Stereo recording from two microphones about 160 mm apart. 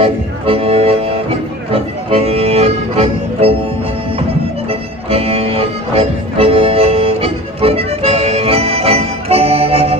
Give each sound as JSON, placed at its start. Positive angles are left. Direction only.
{"t": 0.0, "sound": "music", "side_deg": -35}
{"t": 4.7, "sound": "music", "side_deg": -40}